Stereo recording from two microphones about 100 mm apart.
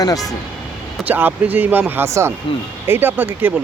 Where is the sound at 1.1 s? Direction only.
20° right (ahead or behind).